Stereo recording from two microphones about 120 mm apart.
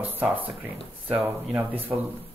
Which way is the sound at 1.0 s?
15° right (ahead or behind).